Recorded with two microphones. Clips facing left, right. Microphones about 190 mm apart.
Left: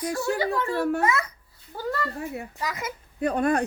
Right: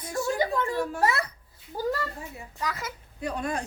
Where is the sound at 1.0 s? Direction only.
35° right (ahead or behind).